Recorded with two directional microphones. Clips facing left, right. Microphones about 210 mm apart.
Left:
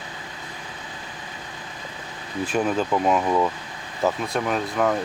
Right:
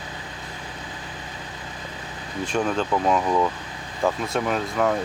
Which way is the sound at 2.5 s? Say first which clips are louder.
Left 1 dB; 5° left (ahead or behind).